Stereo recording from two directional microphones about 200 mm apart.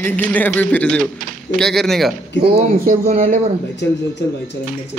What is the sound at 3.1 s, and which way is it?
Speech, 35° right (ahead or behind).